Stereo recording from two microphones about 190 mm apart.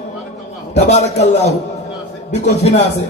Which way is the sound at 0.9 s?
35° left (ahead or behind).